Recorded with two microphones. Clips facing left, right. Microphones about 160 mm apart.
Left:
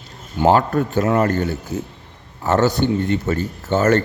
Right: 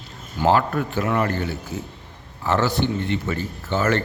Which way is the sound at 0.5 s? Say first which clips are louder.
Left 4 dB; 40° left (ahead or behind).